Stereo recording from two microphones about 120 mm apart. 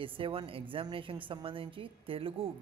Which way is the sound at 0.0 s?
50° right (ahead or behind).